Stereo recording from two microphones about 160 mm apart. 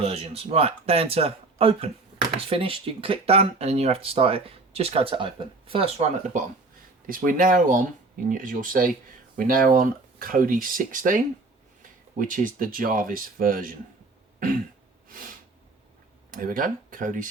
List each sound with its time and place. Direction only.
0.0 s speech: 40° right (ahead or behind)
7.1 s speech: 60° right (ahead or behind)
15.1 s a sound: 60° right (ahead or behind)
16.3 s speech: 60° right (ahead or behind)